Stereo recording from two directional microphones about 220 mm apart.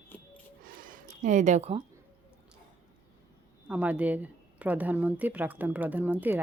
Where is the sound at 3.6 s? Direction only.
5° right (ahead or behind).